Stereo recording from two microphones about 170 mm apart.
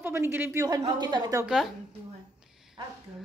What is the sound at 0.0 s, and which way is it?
A woman's voice, 15° right (ahead or behind).